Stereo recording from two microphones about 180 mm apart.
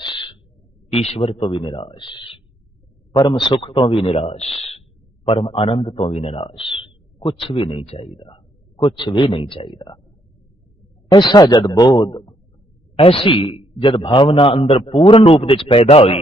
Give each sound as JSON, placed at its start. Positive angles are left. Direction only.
{"t": 0.0, "sound": "a sound", "side_deg": 25}
{"t": 0.9, "sound": "a man's voice", "side_deg": 35}
{"t": 11.1, "sound": "a man's voice", "side_deg": 25}